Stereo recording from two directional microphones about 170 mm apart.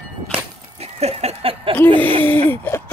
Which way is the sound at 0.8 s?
40° right (ahead or behind).